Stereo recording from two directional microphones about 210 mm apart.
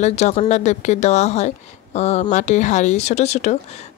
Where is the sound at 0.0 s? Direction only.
30° left (ahead or behind).